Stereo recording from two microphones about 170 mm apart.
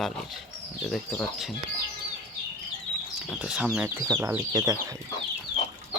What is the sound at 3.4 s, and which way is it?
Speech, 5° right (ahead or behind).